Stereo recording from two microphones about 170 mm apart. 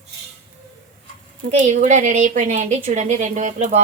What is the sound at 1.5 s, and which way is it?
A woman's voice, 45° right (ahead or behind).